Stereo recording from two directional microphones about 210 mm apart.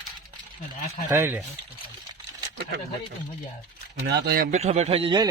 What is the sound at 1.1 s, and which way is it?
Speech, 10° right (ahead or behind).